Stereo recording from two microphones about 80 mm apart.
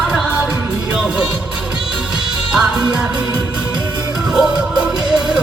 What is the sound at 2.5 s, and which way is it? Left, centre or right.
Music, centre.